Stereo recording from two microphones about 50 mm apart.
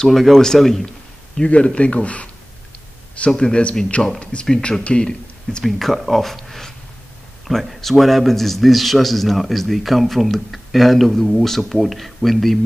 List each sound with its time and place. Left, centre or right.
0.0 s a man's voice: centre
1.5 s speech: left
3.3 s speech: centre
5.6 s a man's voice: centre